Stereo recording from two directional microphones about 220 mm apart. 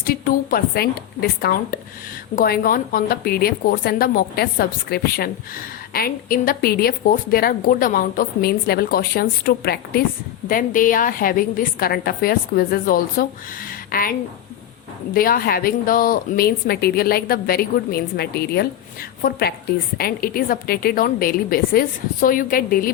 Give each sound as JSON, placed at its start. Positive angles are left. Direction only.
{"t": 0.0, "sound": "a woman's voice", "side_deg": 40}